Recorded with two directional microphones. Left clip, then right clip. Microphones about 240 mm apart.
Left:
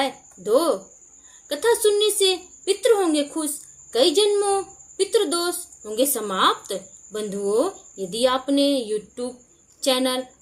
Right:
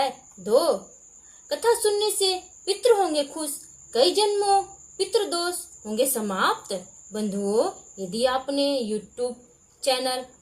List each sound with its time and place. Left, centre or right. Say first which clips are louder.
0.0 s speech: left 1 dB; left